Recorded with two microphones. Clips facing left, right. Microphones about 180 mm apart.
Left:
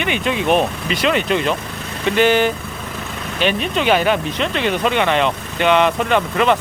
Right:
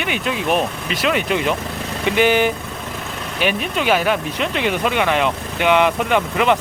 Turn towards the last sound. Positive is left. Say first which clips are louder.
# left 1 dB
turn(degrees=-10)  # may be behind; listen again after turning